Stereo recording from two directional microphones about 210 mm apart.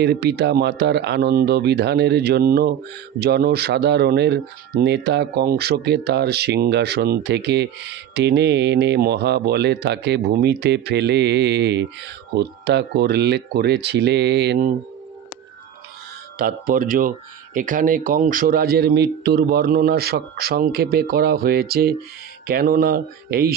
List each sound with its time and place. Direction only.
0.0 s speech: 50° right (ahead or behind)
16.3 s speech: 45° right (ahead or behind)